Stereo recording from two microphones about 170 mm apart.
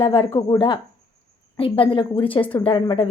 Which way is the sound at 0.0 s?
30° left (ahead or behind).